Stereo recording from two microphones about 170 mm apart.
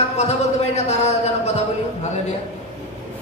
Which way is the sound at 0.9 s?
40° left (ahead or behind).